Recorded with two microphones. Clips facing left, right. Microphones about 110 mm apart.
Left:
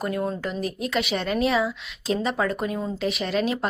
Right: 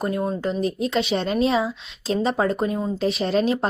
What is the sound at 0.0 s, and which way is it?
A woman's voice, 25° right (ahead or behind).